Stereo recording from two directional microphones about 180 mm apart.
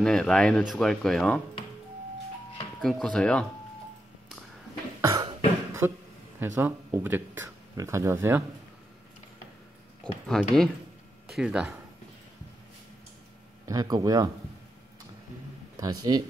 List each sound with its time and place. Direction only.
0.0 s speech: 5° left (ahead or behind)
2.8 s speech: 5° left (ahead or behind)
5.0 s cough: 20° right (ahead or behind)
6.4 s speech: 15° right (ahead or behind)
10.2 s speech: 5° left (ahead or behind)
13.7 s speech: 20° right (ahead or behind)
15.8 s speech: 20° right (ahead or behind)